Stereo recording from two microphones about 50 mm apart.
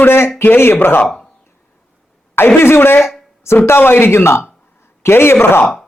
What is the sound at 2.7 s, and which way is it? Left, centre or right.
A man's voice, left.